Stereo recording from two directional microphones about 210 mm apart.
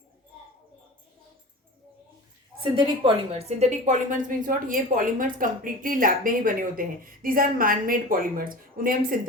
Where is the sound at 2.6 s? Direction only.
25° right (ahead or behind).